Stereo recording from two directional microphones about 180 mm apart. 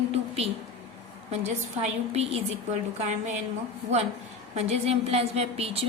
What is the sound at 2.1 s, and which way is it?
Speech, 35° right (ahead or behind).